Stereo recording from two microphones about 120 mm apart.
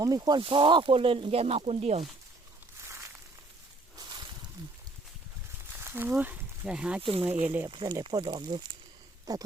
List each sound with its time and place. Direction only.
0.0 s speech: 35° right (ahead or behind); by 2.0 s 60° right (ahead or behind)
2.8 s a sound: 25° right (ahead or behind)
5.8 s speech: 20° right (ahead or behind)
7.0 s speech: 45° right (ahead or behind)
7.4 s speech: 15° right (ahead or behind)
7.7 s speech: 45° right (ahead or behind)